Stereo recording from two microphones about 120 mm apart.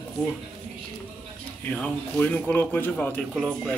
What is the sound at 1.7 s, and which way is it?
Speech, 10° left (ahead or behind).